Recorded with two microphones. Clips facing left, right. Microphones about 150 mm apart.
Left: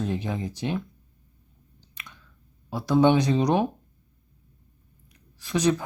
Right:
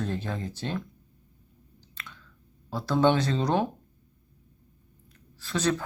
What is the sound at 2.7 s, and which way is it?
Speech, 15° left (ahead or behind).